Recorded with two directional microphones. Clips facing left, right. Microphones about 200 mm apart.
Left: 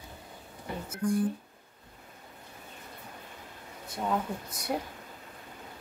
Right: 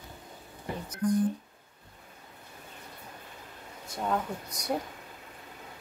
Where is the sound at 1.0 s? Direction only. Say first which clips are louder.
Right 2 dB; 40° right (ahead or behind).